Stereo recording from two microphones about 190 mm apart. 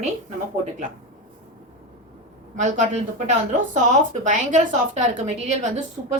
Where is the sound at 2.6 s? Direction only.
40° right (ahead or behind).